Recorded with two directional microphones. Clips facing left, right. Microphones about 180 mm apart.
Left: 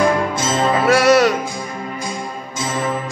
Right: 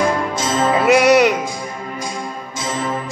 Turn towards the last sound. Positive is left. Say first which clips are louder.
# right 1 dB
turn(degrees=-15)  # may be behind; listen again after turning